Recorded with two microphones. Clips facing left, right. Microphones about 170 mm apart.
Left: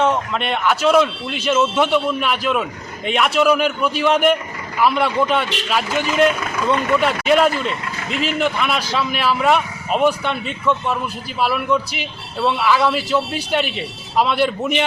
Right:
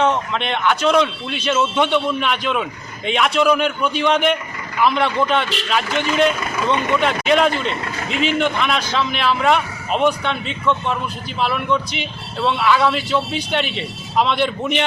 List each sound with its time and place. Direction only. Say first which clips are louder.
0.0 s a man's voice: even; 5° left (ahead or behind)